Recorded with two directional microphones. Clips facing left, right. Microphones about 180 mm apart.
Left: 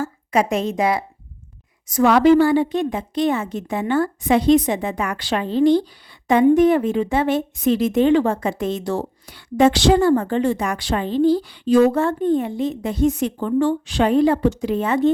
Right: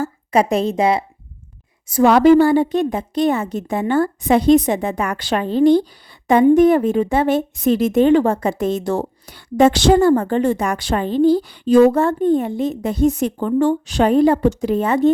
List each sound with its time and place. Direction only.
0.0 s a woman's voice: 35° right (ahead or behind)